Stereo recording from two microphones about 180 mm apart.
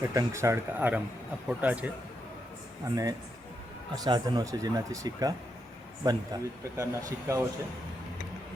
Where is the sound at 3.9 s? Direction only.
20° right (ahead or behind).